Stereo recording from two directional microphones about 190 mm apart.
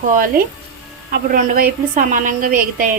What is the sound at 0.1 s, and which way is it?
A woman's voice, 45° right (ahead or behind).